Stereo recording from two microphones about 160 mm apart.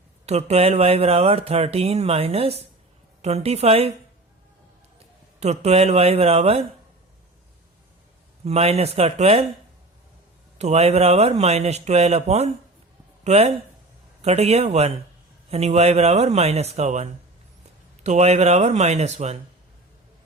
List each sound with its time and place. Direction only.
0.3 s speech: 40° right (ahead or behind)
5.4 s speech: 40° right (ahead or behind)
8.4 s speech: 40° right (ahead or behind)
10.6 s speech: 40° right (ahead or behind)